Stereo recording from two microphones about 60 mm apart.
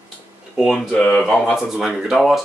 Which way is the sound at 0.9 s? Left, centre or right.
Left.